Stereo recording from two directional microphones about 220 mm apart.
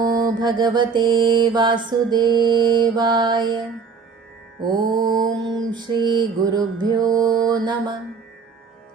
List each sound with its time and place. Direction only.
0.0 s mantra: 20° right (ahead or behind)
4.6 s mantra: 20° right (ahead or behind)